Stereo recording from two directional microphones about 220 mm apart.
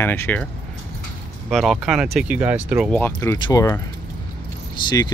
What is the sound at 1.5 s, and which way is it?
Speech, centre (ahead or behind).